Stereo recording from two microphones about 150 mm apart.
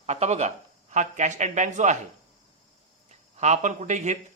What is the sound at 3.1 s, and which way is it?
Speech, 50° right (ahead or behind).